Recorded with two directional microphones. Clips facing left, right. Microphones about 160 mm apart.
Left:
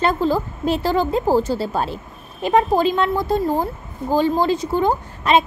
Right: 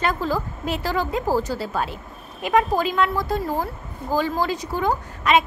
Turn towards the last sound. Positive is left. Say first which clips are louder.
# left 2 dB
turn(degrees=30)  # may be behind; listen again after turning